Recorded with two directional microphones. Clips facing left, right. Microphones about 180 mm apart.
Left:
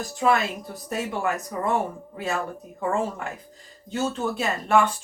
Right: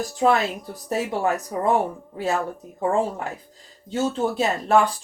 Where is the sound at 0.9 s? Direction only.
35° right (ahead or behind).